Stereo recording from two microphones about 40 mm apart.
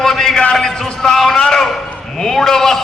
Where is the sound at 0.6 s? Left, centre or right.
Centre.